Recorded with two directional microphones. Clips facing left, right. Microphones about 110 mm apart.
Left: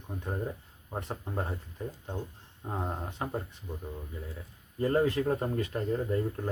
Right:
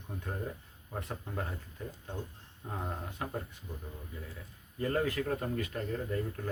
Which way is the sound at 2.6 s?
25° left (ahead or behind).